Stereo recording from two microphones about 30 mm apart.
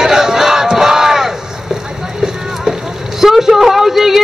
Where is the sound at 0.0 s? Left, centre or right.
Centre.